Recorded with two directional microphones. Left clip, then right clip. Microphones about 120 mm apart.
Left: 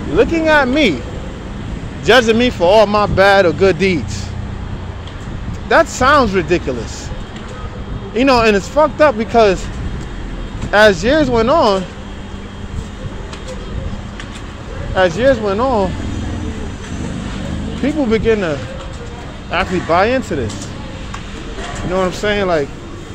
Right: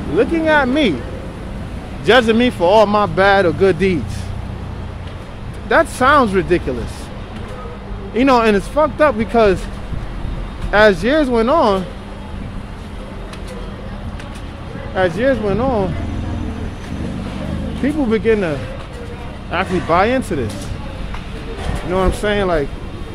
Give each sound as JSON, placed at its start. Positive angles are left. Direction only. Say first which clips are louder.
{"t": 0.1, "sound": "speech", "louder": "left 2 dB", "side_deg": -15}
{"t": 2.0, "sound": "speech", "louder": "left 2 dB", "side_deg": -25}
{"t": 5.7, "sound": "speech", "louder": "left 2 dB", "side_deg": -25}
{"t": 8.1, "sound": "speech", "louder": "left 1 dB", "side_deg": -35}
{"t": 10.7, "sound": "speech", "louder": "left 2 dB", "side_deg": -30}
{"t": 15.0, "sound": "speech", "louder": "left 3 dB", "side_deg": -25}
{"t": 17.8, "sound": "speech", "louder": "left 1 dB", "side_deg": -30}
{"t": 19.5, "sound": "speech", "louder": "left 2 dB", "side_deg": -15}
{"t": 19.9, "sound": "speech", "louder": "left 1 dB", "side_deg": -30}
{"t": 21.9, "sound": "speech", "louder": "left 1 dB", "side_deg": -25}